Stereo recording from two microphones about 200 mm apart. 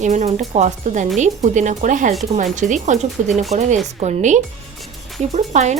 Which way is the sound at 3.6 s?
35° right (ahead or behind).